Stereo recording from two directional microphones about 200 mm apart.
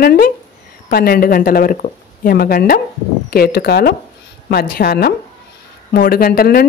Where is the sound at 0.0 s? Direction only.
50° left (ahead or behind).